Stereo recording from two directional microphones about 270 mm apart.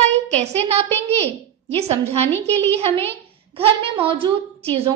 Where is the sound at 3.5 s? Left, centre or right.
Centre.